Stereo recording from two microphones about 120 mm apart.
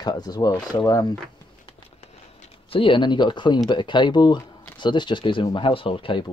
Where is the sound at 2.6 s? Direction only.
50° left (ahead or behind).